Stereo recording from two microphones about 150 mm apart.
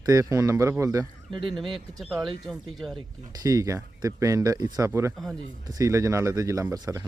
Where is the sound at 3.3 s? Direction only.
25° right (ahead or behind).